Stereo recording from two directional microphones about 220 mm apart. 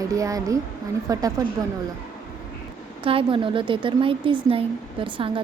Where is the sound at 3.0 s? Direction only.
25° right (ahead or behind).